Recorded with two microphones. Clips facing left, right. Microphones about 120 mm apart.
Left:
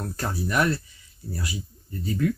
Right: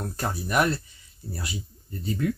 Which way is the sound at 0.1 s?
20° right (ahead or behind).